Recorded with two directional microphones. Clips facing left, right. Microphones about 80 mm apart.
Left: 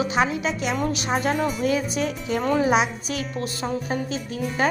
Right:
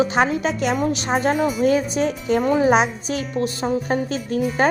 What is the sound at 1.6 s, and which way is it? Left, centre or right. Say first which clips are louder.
Speech: right 5 dB; right.